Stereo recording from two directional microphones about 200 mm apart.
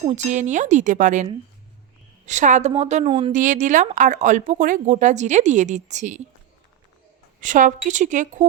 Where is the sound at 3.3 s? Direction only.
40° right (ahead or behind).